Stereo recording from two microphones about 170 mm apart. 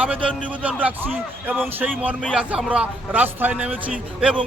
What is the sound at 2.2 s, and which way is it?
Speech, 5° left (ahead or behind).